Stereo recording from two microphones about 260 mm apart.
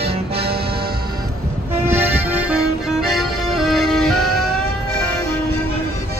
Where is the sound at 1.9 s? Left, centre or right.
Centre.